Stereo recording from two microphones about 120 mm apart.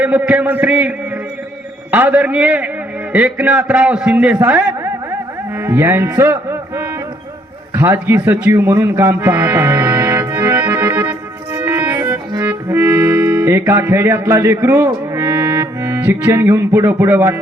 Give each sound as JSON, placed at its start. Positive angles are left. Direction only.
{"t": 0.0, "sound": "a man's voice", "side_deg": -15}
{"t": 11.5, "sound": "music", "side_deg": -20}